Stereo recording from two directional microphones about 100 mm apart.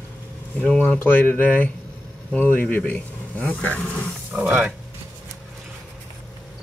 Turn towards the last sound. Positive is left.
turn(degrees=-10)  # may be behind; listen again after turning